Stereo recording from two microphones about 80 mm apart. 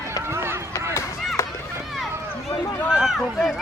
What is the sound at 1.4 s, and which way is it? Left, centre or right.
Run, left.